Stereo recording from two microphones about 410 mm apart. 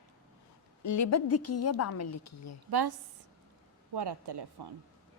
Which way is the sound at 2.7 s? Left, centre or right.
Right.